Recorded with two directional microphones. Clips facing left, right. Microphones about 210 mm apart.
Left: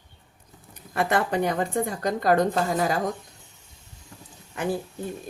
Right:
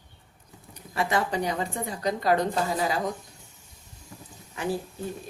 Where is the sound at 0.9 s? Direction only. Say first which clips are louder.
Left 3 dB; 55° left (ahead or behind).